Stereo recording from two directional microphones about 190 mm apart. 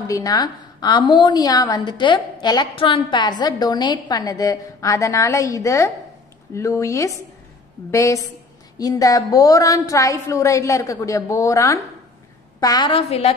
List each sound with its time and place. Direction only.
0.1 s a woman's voice: 20° left (ahead or behind)